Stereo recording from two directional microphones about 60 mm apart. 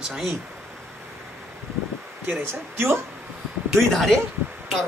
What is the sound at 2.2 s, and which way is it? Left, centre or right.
Speech, right.